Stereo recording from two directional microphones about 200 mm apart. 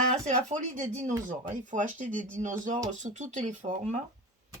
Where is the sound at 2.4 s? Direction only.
40° right (ahead or behind).